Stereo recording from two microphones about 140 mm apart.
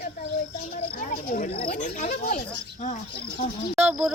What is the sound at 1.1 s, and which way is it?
Speech, 70° left (ahead or behind).